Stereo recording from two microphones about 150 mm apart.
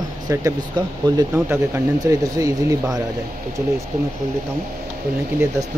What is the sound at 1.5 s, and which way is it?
Speech, 20° right (ahead or behind).